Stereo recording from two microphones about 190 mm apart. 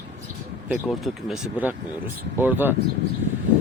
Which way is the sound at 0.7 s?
Centre (ahead or behind).